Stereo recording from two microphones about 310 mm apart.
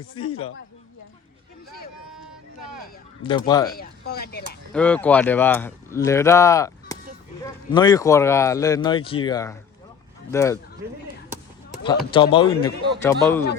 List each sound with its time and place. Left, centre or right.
0.2 s speech: centre
3.2 s speech: centre
3.7 s speech: left
4.7 s speech: centre
11.8 s speech: centre